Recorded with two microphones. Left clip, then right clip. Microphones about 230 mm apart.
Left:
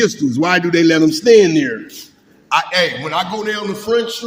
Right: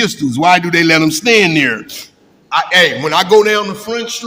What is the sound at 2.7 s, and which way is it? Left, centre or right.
Speech, right.